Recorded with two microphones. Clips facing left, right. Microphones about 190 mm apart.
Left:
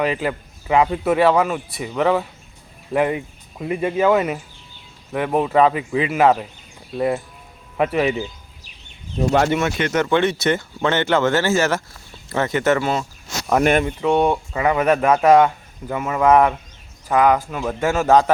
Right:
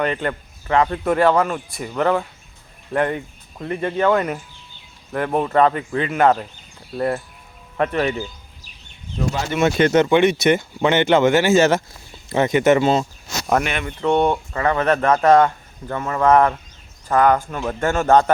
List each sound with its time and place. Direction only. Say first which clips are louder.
0.0 s speech: left 1 dB; 5° left (ahead or behind)
9.6 s speech: right 5 dB; 30° right (ahead or behind)
10.0 s speech: even; 15° right (ahead or behind)
13.6 s speech: left 7 dB; 15° left (ahead or behind)
14.0 s speech: even; 5° left (ahead or behind)